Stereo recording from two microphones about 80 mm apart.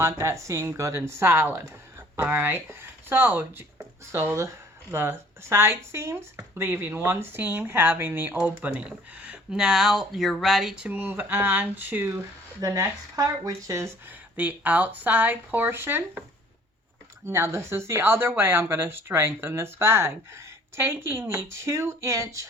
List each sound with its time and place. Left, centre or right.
0.0 s speech: right
8.4 s speech: centre
10.8 s speech: right
12.5 s speech: right
14.3 s speech: centre
17.2 s speech: right